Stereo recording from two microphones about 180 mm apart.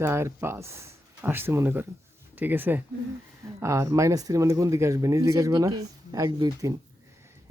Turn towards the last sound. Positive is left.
turn(degrees=-20)  # may be behind; listen again after turning